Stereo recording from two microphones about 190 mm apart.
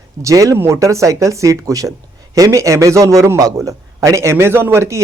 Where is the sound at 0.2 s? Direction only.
15° right (ahead or behind).